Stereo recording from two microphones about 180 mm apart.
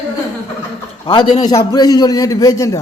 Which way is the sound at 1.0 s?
25° left (ahead or behind).